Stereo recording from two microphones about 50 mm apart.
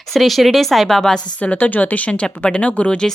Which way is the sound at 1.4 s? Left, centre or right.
Left.